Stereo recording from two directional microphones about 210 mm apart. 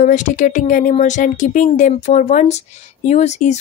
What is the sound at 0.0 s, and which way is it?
Speech, 35° left (ahead or behind).